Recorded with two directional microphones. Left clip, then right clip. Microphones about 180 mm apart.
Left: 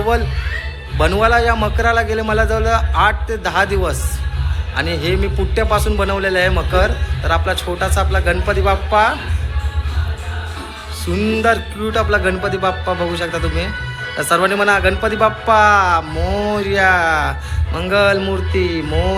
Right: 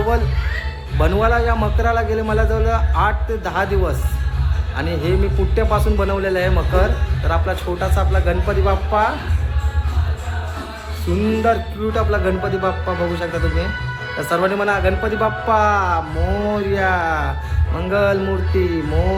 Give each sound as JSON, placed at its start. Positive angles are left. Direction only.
{"t": 0.9, "sound": "a man's voice", "side_deg": 0}
{"t": 11.4, "sound": "a man's voice", "side_deg": 0}